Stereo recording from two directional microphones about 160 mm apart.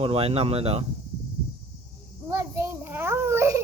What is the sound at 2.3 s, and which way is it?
Child singing, 15° right (ahead or behind).